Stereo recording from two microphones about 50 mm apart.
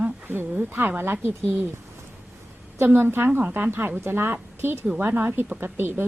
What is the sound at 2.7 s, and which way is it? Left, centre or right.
A woman's voice, right.